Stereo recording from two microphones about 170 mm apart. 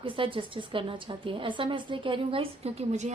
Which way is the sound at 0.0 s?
30° right (ahead or behind).